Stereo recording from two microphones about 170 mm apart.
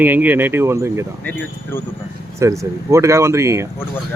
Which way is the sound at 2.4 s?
15° right (ahead or behind).